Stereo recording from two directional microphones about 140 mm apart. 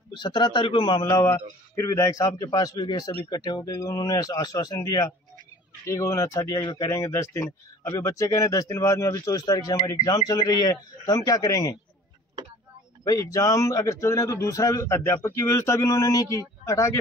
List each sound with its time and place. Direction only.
0.1 s a man's voice: 35° left (ahead or behind)
1.0 s speech: 20° left (ahead or behind)
13.0 s speech: 25° left (ahead or behind)